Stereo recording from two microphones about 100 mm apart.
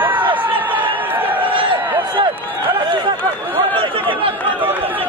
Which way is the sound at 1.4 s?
60° right (ahead or behind).